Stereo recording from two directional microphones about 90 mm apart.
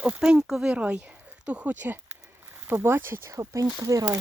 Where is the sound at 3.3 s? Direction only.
40° right (ahead or behind).